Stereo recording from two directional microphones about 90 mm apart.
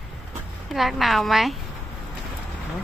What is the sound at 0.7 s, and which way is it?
Speech, centre (ahead or behind).